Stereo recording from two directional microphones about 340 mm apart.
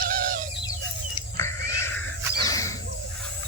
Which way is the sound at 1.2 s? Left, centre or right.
Centre.